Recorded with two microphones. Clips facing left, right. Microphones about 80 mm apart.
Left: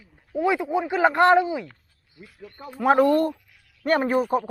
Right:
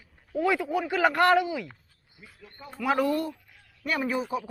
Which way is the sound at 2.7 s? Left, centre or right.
Left.